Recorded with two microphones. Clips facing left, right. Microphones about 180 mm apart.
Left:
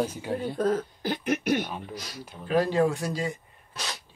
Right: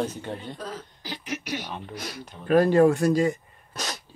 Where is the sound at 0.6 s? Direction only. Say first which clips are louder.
Left 11 dB; 50° left (ahead or behind).